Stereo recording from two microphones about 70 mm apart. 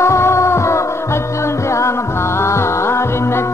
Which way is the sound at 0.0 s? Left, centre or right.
Left.